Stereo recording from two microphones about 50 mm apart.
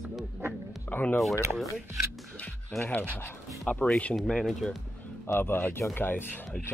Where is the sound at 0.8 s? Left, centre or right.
Left.